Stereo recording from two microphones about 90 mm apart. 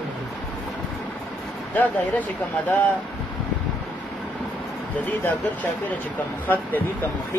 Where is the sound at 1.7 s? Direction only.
20° left (ahead or behind).